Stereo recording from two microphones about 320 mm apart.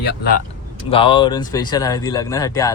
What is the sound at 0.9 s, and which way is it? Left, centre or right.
Speech, centre.